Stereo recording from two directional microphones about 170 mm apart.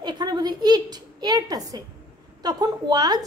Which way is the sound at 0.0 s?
25° right (ahead or behind).